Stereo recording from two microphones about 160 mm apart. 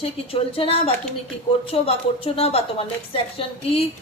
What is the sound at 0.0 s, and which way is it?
A woman's voice, 35° left (ahead or behind).